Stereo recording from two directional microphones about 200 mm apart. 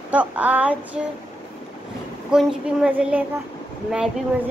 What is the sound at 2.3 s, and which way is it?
A woman's voice, 5° right (ahead or behind).